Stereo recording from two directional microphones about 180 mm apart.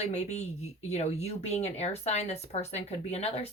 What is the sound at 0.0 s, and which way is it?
Speech, 35° left (ahead or behind).